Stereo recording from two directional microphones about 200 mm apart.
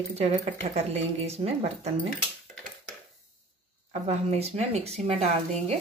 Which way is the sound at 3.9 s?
30° right (ahead or behind).